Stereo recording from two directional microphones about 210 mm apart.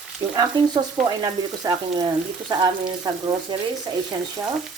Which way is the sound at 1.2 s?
15° right (ahead or behind).